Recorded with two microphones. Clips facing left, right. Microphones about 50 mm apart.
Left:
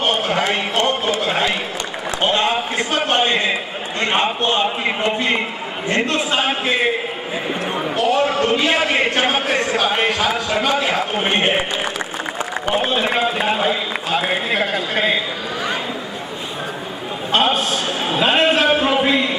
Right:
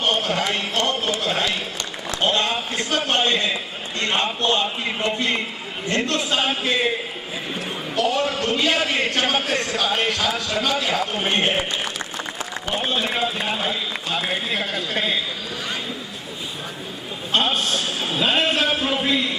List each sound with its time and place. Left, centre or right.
0.0 s a man's voice: left
7.9 s a man's voice: left
17.3 s a man's voice: centre